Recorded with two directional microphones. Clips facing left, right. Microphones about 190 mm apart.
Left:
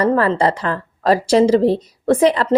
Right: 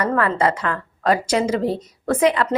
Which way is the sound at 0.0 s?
35° left (ahead or behind).